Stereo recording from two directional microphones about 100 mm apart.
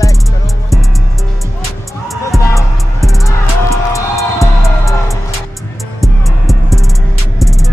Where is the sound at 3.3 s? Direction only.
30° left (ahead or behind).